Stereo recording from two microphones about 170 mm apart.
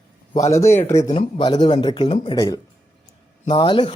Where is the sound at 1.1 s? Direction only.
30° left (ahead or behind).